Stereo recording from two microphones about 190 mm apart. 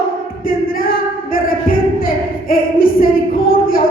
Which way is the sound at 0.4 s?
50° left (ahead or behind).